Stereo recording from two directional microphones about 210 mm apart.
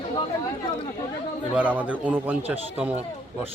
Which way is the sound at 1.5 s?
5° right (ahead or behind).